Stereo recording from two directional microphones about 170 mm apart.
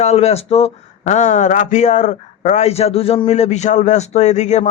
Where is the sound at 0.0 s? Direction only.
40° left (ahead or behind).